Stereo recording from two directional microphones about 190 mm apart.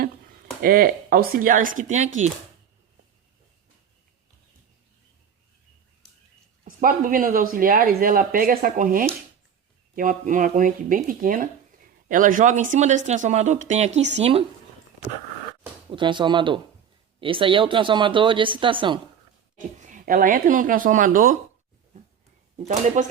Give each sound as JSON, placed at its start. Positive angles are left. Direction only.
{"t": 0.6, "sound": "speech", "side_deg": -50}
{"t": 6.7, "sound": "speech", "side_deg": -45}
{"t": 15.9, "sound": "speech", "side_deg": -25}
{"t": 19.5, "sound": "speech", "side_deg": -40}
{"t": 22.5, "sound": "speech", "side_deg": -35}